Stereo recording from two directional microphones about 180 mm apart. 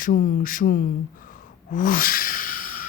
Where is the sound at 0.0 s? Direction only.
50° left (ahead or behind).